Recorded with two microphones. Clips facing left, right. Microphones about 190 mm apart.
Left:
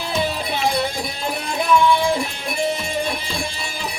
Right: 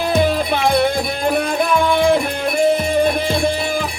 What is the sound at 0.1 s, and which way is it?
Music, 55° right (ahead or behind).